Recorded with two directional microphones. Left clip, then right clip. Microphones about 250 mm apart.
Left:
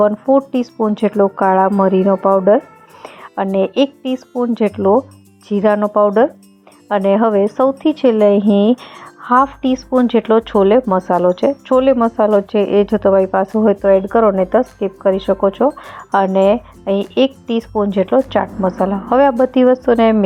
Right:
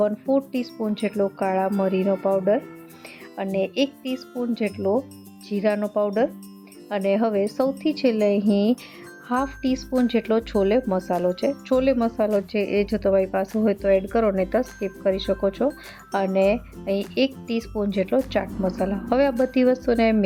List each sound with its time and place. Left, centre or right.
0.0 s speech: centre
12.5 s speech: left
13.1 s speech: centre